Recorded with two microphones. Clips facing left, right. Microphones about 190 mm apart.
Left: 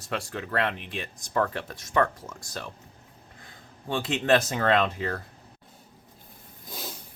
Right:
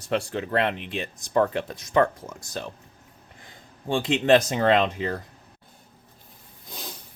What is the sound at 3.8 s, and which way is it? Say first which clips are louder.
Speech: right 4 dB; 25° right (ahead or behind).